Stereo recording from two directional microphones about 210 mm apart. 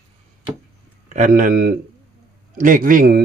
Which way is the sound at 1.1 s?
35° right (ahead or behind).